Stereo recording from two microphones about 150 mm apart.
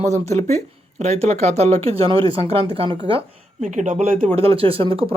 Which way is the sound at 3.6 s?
55° right (ahead or behind).